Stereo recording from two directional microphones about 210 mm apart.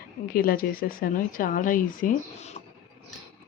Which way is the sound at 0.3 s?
45° left (ahead or behind).